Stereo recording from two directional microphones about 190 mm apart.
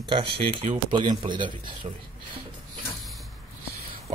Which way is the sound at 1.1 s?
25° right (ahead or behind).